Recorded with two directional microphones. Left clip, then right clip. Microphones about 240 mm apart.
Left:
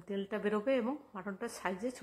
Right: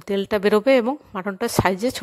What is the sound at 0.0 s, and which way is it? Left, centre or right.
Speech, right.